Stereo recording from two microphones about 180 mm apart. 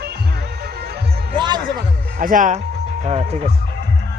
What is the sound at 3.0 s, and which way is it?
Speech, 35° right (ahead or behind).